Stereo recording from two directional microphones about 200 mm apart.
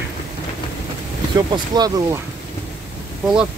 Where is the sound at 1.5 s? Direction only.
20° right (ahead or behind).